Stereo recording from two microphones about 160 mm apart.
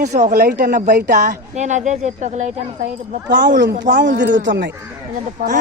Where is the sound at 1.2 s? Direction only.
50° right (ahead or behind).